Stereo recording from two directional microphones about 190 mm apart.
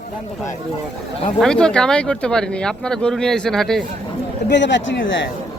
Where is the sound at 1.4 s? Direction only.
5° left (ahead or behind).